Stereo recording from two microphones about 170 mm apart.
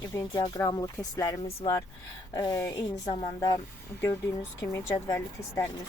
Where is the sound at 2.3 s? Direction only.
20° left (ahead or behind).